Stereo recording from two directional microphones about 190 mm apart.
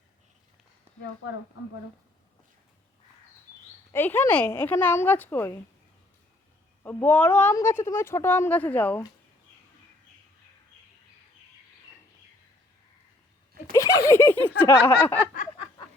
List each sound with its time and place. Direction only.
3.9 s a woman's voice: 10° left (ahead or behind)
6.8 s a woman's voice: 10° left (ahead or behind)
13.7 s a sound: 15° left (ahead or behind)